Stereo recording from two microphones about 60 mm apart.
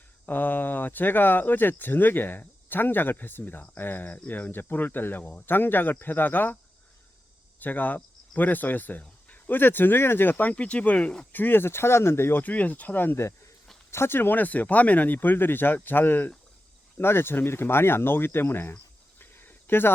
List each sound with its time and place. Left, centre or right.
0.3 s speech: left
7.6 s speech: left
12.4 s speech: left
13.9 s speech: left
19.2 s cricket: left